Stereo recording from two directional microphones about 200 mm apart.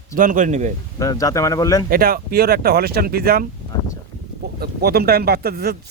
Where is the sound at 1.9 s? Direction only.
50° right (ahead or behind).